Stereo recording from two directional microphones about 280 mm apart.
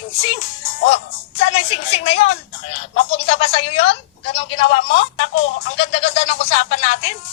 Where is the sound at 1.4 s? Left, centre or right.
Left.